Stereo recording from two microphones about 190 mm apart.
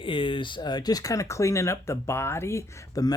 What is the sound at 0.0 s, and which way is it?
Speech, 25° left (ahead or behind).